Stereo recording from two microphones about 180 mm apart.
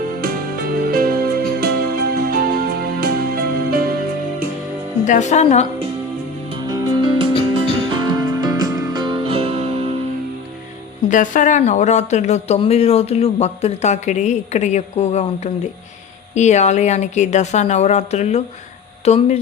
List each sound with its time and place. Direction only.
0.2 s music: 55° right (ahead or behind)
5.0 s speech: 40° left (ahead or behind)
6.5 s music: 20° right (ahead or behind)
11.1 s speech: 45° left (ahead or behind)